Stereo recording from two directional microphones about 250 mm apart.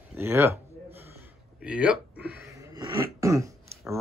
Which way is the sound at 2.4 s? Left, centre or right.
Centre.